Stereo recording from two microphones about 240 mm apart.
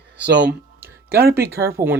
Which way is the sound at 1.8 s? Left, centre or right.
Centre.